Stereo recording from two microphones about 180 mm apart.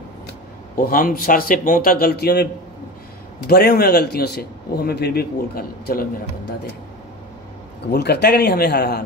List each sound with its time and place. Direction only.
0.7 s speech: 50° left (ahead or behind)
3.4 s a man's voice: 60° left (ahead or behind)
7.9 s a man's voice: 65° left (ahead or behind)